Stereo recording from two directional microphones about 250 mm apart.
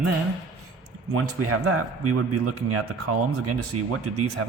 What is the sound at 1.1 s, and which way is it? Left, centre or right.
Speech, right.